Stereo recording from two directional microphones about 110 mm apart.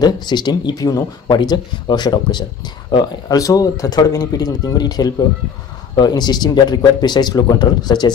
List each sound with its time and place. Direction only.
0.0 s speech: 40° left (ahead or behind)